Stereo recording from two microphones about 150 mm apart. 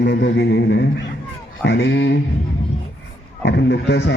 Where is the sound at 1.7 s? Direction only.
90° left.